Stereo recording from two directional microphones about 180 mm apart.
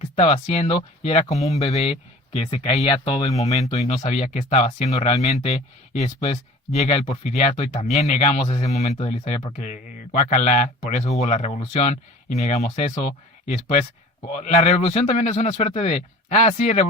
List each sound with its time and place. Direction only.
0.2 s speech: 35° left (ahead or behind)